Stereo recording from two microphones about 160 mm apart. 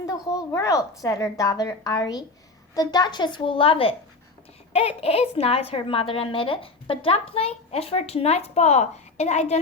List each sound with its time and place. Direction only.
0.0 s a woman's voice: 20° left (ahead or behind); by 9.6 s 45° left (ahead or behind)